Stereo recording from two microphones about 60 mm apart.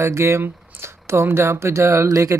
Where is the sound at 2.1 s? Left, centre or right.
Right.